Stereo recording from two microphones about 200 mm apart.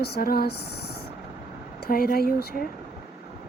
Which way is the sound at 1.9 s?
45° left (ahead or behind).